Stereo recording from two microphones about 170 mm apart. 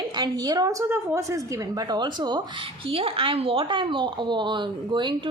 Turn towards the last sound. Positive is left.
turn(degrees=-25)  # may be behind; listen again after turning